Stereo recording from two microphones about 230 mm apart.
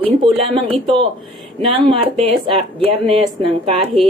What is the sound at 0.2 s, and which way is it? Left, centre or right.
Speech, right.